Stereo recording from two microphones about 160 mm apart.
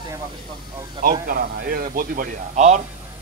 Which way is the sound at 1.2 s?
60° right (ahead or behind).